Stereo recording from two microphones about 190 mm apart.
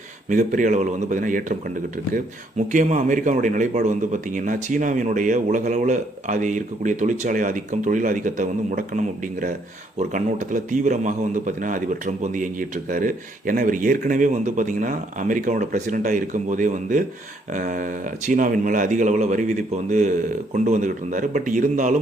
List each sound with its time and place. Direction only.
0.3 s a man's voice: 45° right (ahead or behind)
2.7 s a man's voice: 45° right (ahead or behind)